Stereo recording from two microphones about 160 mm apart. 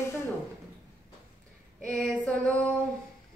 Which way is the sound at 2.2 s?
10° left (ahead or behind).